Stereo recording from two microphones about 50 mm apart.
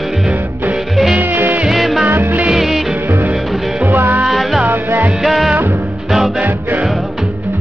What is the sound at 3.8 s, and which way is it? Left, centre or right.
Music, right.